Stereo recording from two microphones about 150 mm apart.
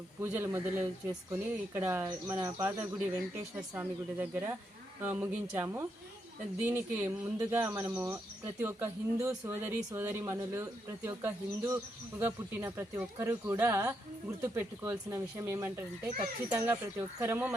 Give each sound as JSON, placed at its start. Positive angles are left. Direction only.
{"t": 0.2, "sound": "speech", "side_deg": -15}
{"t": 3.8, "sound": "speech", "side_deg": -10}